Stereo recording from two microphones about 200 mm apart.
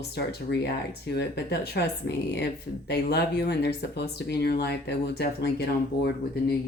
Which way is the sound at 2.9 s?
55° left (ahead or behind).